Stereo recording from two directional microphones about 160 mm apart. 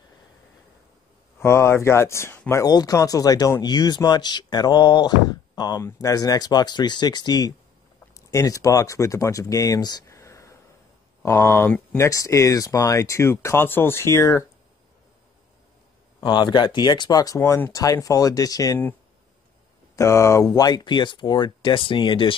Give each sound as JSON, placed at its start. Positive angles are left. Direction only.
{"t": 1.4, "sound": "speech", "side_deg": 15}
{"t": 2.6, "sound": "speech", "side_deg": 25}
{"t": 16.2, "sound": "speech", "side_deg": 25}
{"t": 20.0, "sound": "speech", "side_deg": 20}